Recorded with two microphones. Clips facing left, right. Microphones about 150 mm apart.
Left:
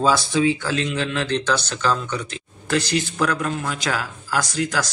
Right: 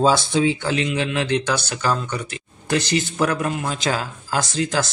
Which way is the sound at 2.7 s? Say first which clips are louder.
Right 1 dB; 20° right (ahead or behind).